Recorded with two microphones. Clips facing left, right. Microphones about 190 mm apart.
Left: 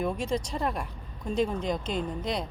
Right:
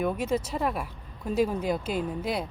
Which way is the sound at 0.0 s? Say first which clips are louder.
Right 2 dB; 5° right (ahead or behind).